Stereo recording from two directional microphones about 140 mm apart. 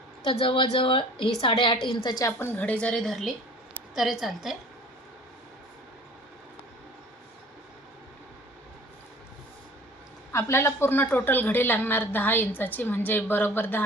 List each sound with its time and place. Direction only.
0.3 s a woman's voice: 40° left (ahead or behind)
2.4 s a woman's voice: 15° left (ahead or behind)
10.3 s a woman's voice: 20° left (ahead or behind)